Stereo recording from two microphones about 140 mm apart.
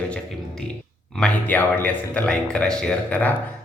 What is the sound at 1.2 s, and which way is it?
Speech, 10° left (ahead or behind).